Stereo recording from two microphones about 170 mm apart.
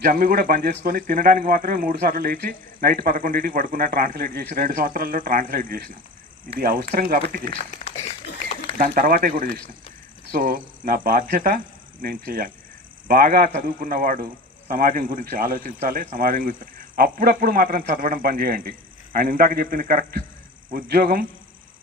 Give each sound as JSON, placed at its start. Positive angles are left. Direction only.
{"t": 0.0, "sound": "speech", "side_deg": -55}
{"t": 7.5, "sound": "speech", "side_deg": 35}
{"t": 8.8, "sound": "speech", "side_deg": -55}